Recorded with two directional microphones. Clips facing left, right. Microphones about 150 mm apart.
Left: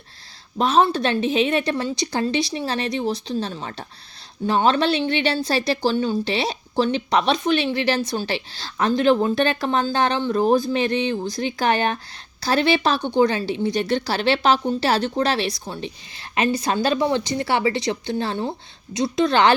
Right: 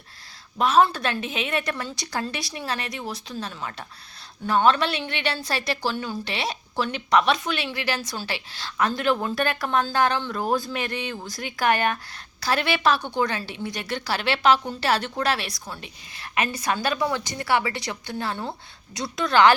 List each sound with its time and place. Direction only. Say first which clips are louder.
0.6 s a woman's voice: left 2 dB; 25° left (ahead or behind)